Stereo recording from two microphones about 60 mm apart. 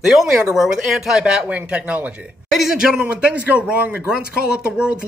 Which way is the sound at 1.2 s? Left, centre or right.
Centre.